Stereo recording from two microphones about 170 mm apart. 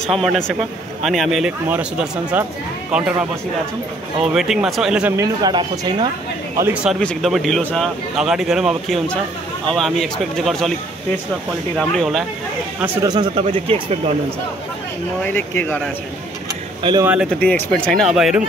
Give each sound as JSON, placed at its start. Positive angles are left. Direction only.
{"t": 0.0, "sound": "a man's voice", "side_deg": 0}
{"t": 4.3, "sound": "a man's voice", "side_deg": -5}
{"t": 5.1, "sound": "speech", "side_deg": -20}
{"t": 6.5, "sound": "a man's voice", "side_deg": -10}
{"t": 11.7, "sound": "a man's voice", "side_deg": 0}
{"t": 13.0, "sound": "speech", "side_deg": -25}
{"t": 15.2, "sound": "speech", "side_deg": 10}
{"t": 17.0, "sound": "speech", "side_deg": -5}
{"t": 17.4, "sound": "a man's voice", "side_deg": 5}